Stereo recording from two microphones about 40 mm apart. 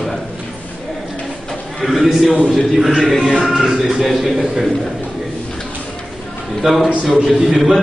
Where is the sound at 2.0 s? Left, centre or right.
Centre.